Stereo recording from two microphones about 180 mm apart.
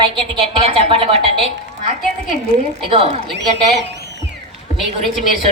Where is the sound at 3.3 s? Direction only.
75° right (ahead or behind).